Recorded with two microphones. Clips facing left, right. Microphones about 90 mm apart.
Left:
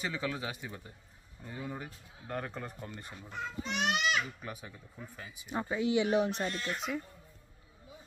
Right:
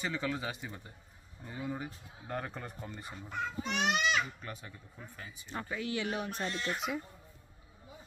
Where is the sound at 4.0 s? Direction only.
10° left (ahead or behind).